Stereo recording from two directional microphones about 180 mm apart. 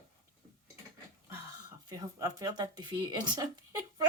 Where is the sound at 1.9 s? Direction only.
20° right (ahead or behind).